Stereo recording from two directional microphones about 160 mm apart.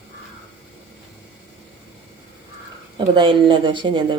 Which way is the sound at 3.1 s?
30° right (ahead or behind).